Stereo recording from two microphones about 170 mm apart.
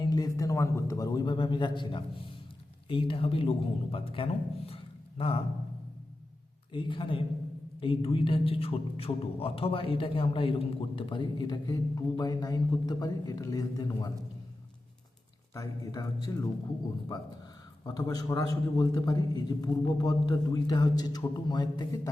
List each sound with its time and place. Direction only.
0.0 s a man's voice: 20° left (ahead or behind)
6.7 s a man's voice: 30° left (ahead or behind)
15.5 s a man's voice: 20° left (ahead or behind)
17.8 s a man's voice: 25° left (ahead or behind)